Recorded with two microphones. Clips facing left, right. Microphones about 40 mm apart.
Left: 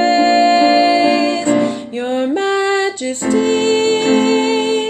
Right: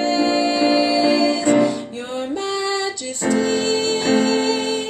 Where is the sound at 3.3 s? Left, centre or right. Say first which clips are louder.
Left 5 dB; left.